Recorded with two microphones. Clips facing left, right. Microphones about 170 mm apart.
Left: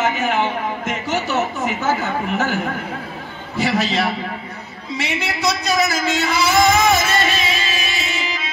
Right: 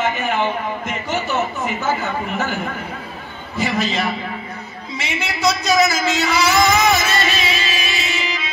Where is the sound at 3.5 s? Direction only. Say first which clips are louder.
Left 2 dB; 85° left.